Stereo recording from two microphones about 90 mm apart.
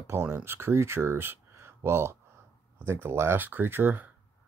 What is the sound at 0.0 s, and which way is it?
Speech, 30° right (ahead or behind).